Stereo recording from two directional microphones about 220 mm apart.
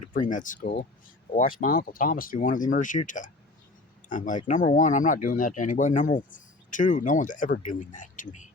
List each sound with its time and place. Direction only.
0.1 s speech: 35° left (ahead or behind)